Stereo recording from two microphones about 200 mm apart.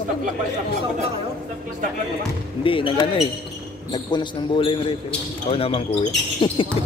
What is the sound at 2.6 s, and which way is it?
Speech, 25° left (ahead or behind).